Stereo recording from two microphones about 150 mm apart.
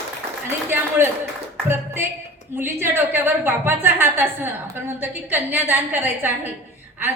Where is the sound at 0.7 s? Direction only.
15° right (ahead or behind).